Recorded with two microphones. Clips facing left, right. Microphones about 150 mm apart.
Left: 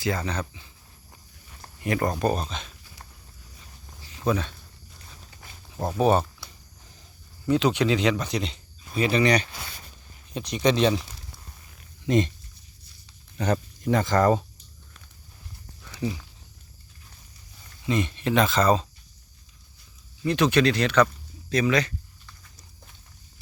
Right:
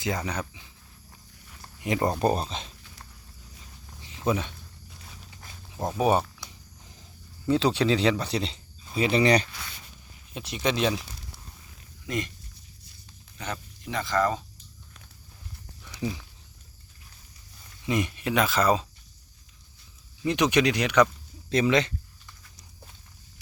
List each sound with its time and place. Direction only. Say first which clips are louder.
0.0 s speech: left 2 dB; 15° right (ahead or behind)
1.8 s speech: even; 20° right (ahead or behind)
2.2 s speech: even; 30° right (ahead or behind)
4.3 s speech: left 1 dB; 15° right (ahead or behind)
6.0 s speech: left 2 dB; 10° right (ahead or behind)
7.4 s speech: left 1 dB; 30° right (ahead or behind)
10.3 s speech: left 5 dB; centre (ahead or behind)
12.0 s speech: left 9 dB; 25° left (ahead or behind)
13.4 s speech: left 10 dB; 45° left (ahead or behind)
17.8 s speech: left 2 dB; 15° right (ahead or behind)
20.2 s speech: left 2 dB; 15° right (ahead or behind)